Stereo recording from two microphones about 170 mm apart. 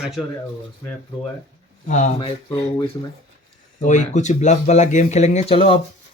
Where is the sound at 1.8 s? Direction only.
45° left (ahead or behind).